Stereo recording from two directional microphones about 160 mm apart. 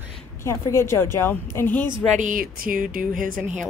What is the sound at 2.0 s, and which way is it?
Speech, 50° right (ahead or behind).